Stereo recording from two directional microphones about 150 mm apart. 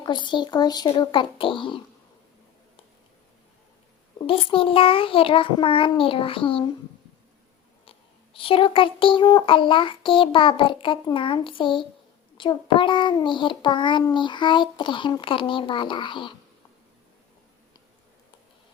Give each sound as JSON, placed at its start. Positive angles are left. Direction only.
{"t": 0.0, "sound": "speech", "side_deg": 30}
{"t": 4.3, "sound": "speech", "side_deg": 35}
{"t": 7.9, "sound": "speech", "side_deg": 35}